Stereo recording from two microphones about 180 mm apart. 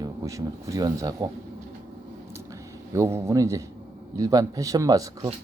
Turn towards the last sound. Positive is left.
turn(degrees=-20)  # may be behind; listen again after turning